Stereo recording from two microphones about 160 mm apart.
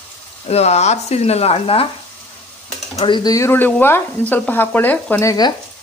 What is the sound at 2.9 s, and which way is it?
Speech, 30° left (ahead or behind).